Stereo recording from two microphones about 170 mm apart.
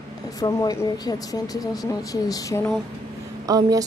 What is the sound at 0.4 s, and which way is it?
Speech, 20° left (ahead or behind).